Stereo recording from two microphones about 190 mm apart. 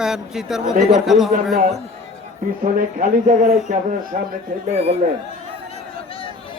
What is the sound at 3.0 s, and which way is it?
Speech, 40° right (ahead or behind).